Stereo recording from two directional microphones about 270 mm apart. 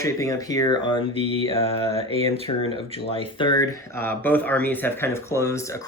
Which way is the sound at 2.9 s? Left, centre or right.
Centre.